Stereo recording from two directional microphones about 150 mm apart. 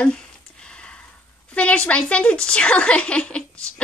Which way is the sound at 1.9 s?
10° left (ahead or behind).